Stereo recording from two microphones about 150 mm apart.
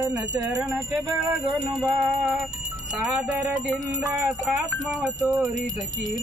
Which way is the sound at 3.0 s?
10° right (ahead or behind).